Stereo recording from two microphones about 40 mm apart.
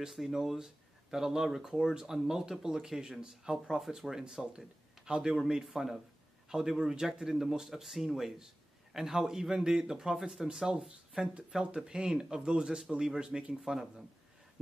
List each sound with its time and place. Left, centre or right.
0.1 s speech: centre
5.7 s speech: centre; by 13.6 s right
13.6 s speech: centre